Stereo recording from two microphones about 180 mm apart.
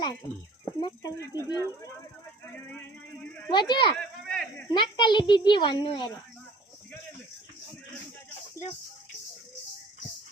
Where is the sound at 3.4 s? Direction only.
25° left (ahead or behind).